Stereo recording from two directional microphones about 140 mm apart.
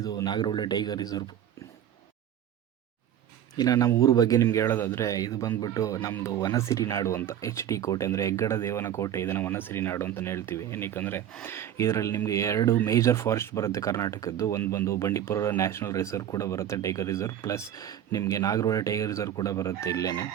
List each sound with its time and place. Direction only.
0.0 s speech: 25° left (ahead or behind)
3.6 s speech: 25° left (ahead or behind)